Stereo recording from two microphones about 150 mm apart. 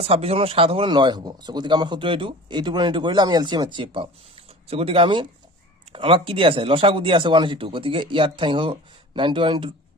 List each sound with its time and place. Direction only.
0.0 s speech: 40° right (ahead or behind)